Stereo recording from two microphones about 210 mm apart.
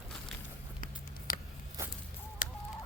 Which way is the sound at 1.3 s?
45° left (ahead or behind).